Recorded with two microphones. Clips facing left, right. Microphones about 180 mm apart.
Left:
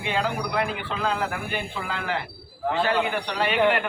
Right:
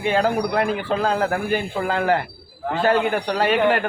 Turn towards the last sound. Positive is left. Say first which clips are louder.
# right 6 dB
turn(degrees=-45)  # may be behind; listen again after turning